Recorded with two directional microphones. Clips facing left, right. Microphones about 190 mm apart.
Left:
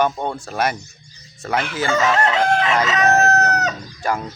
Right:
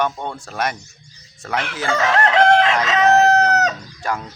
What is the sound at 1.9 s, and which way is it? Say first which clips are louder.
Chicken: right 1 dB; 70° right (ahead or behind).